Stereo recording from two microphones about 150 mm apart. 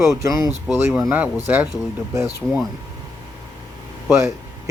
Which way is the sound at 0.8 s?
10° right (ahead or behind).